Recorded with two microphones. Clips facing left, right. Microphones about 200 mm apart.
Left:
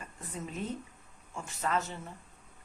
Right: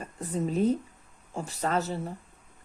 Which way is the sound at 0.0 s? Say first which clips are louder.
Right 11 dB; 35° right (ahead or behind).